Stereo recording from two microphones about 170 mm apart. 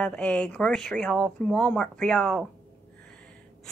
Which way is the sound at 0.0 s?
5° left (ahead or behind).